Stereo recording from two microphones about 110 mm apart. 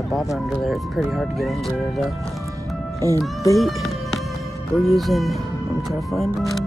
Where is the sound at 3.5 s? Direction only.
Centre (ahead or behind).